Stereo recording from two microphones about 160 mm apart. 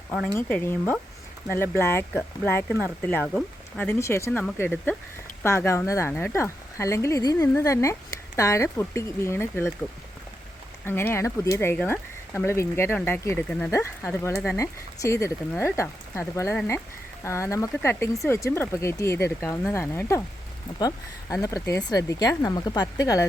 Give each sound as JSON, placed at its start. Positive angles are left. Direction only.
{"t": 0.3, "sound": "speech", "side_deg": 15}
{"t": 3.1, "sound": "speech", "side_deg": 10}
{"t": 10.8, "sound": "speech", "side_deg": 15}